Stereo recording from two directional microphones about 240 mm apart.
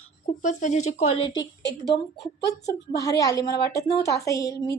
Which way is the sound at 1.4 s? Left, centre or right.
Left.